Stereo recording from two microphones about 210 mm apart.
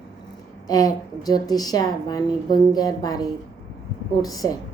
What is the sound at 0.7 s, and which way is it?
A woman's voice, 15° left (ahead or behind).